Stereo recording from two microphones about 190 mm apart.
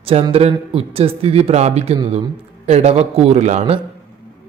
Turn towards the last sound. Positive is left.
turn(degrees=-35)  # may be behind; listen again after turning